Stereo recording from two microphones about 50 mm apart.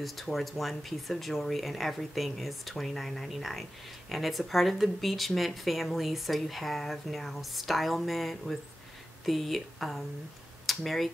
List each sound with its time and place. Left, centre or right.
0.0 s speech: centre